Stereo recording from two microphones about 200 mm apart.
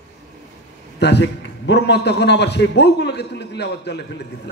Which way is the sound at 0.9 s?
60° left (ahead or behind).